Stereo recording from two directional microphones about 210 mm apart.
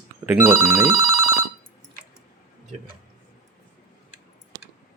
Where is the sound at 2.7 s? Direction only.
35° right (ahead or behind).